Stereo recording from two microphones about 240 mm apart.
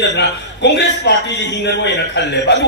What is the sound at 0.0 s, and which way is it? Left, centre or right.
A man's voice, left.